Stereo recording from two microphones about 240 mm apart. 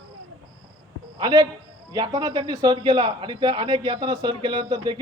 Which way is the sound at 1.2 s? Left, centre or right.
Centre.